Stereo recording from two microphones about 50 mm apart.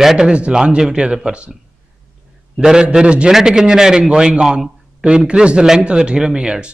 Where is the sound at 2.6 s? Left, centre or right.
Centre.